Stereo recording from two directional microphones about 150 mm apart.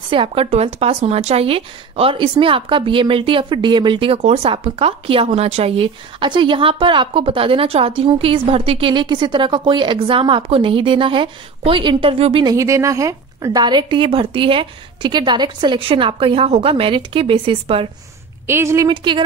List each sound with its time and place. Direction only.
0.1 s speech: 35° right (ahead or behind)
12.5 s speech: 20° right (ahead or behind); by 17.8 s 40° right (ahead or behind)
18.5 s a woman's voice: 20° right (ahead or behind)
18.9 s speech: 30° right (ahead or behind)